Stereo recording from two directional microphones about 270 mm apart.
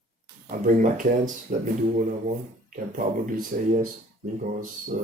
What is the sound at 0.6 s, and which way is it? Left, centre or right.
Speech, right.